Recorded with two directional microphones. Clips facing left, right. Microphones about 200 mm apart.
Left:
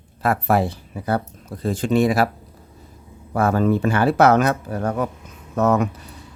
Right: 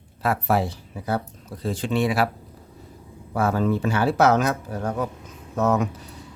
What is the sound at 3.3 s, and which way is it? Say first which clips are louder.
Speech: left 4 dB; 55° left (ahead or behind).